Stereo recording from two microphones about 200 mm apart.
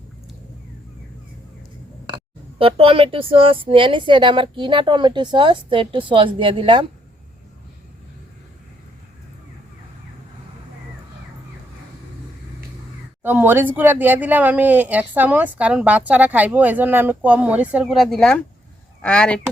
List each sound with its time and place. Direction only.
2.6 s speech: 30° right (ahead or behind)
13.2 s speech: 10° right (ahead or behind)